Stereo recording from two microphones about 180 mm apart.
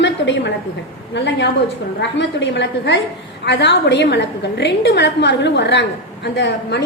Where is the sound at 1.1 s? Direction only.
75° left (ahead or behind).